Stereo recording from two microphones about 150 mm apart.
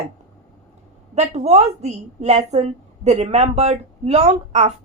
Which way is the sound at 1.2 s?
45° right (ahead or behind).